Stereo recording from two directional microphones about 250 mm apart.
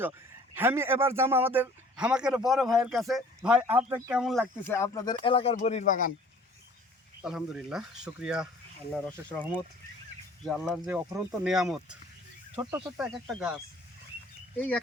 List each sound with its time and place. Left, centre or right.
0.5 s a man's voice: centre; by 6.1 s left
7.2 s a man's voice: centre
10.4 s a man's voice: centre
12.6 s speech: centre
13.0 s a man's voice: centre
14.5 s speech: centre